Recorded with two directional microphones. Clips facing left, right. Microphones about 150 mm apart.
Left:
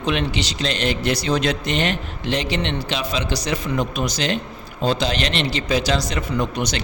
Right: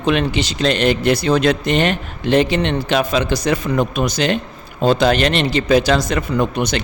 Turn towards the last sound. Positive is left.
turn(degrees=-55)  # may be behind; listen again after turning